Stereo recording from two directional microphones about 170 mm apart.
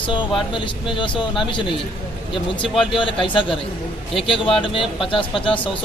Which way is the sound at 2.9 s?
30° left (ahead or behind).